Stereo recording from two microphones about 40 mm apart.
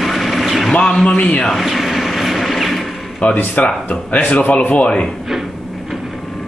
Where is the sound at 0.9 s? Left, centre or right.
Centre.